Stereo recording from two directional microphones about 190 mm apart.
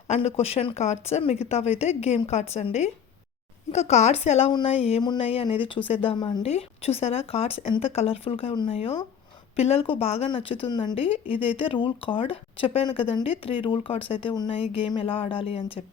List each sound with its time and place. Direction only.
0.1 s a woman's voice: 35° left (ahead or behind)